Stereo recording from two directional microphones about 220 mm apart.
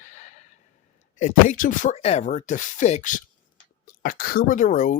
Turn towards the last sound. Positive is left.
turn(degrees=35)  # may be behind; listen again after turning